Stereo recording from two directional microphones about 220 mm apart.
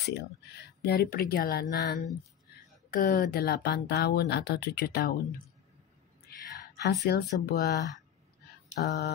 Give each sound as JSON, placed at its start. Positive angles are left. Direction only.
{"t": 0.1, "sound": "speech", "side_deg": 45}
{"t": 6.8, "sound": "speech", "side_deg": 50}